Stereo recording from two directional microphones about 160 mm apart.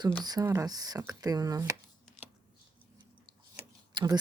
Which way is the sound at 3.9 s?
25° right (ahead or behind).